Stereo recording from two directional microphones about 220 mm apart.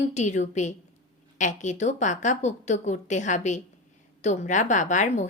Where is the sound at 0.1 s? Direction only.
30° left (ahead or behind).